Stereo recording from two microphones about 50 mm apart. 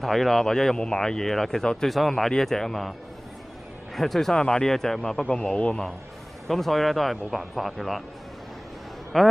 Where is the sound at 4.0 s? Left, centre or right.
Centre.